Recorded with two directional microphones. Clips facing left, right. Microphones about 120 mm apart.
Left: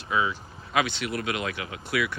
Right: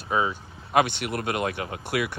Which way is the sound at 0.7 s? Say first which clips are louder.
Right 4 dB; 50° right (ahead or behind).